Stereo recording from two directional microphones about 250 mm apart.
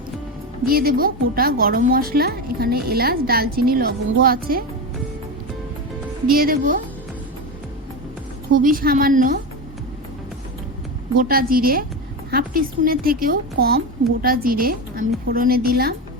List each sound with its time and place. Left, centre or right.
0.6 s a woman's voice: right
6.2 s a woman's voice: right
8.5 s a woman's voice: right
11.1 s a woman's voice: right